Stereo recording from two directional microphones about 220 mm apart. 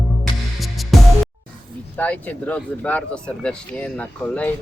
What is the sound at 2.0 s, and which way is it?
Speech, 5° left (ahead or behind).